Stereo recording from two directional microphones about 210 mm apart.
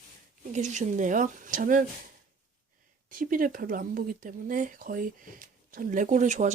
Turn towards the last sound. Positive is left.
turn(degrees=-35)  # may be behind; listen again after turning